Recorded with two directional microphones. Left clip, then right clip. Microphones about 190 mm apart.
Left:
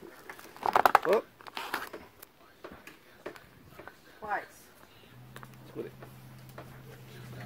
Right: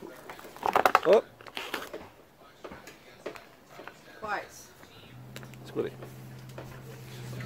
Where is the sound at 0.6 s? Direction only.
15° left (ahead or behind).